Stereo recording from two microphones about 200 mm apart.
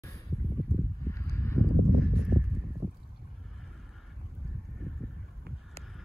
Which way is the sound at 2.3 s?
25° right (ahead or behind).